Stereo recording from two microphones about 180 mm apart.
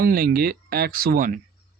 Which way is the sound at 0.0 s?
55° right (ahead or behind).